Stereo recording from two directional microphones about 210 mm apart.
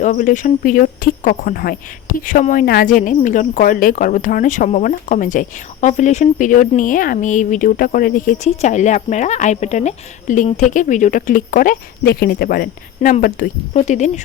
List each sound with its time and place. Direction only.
0.0 s speech: 35° left (ahead or behind)